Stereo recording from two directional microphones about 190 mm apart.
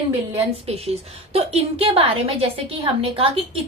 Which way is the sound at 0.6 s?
35° right (ahead or behind).